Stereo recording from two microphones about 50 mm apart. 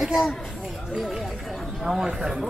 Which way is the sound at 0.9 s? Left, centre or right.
Centre.